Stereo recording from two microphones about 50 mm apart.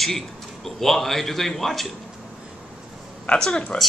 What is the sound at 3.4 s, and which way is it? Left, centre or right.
Speech, centre.